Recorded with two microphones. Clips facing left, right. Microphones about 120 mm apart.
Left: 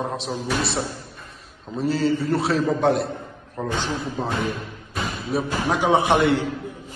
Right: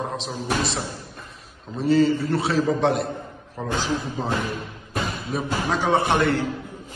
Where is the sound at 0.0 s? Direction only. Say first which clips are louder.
Left 2 dB; centre (ahead or behind).